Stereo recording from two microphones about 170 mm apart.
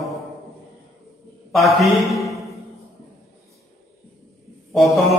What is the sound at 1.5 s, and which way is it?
Speech, centre (ahead or behind).